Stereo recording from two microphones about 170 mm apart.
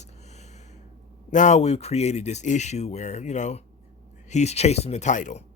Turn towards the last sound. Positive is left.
turn(degrees=45)  # may be behind; listen again after turning